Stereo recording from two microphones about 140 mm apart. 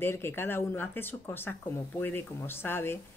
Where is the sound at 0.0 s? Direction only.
15° left (ahead or behind).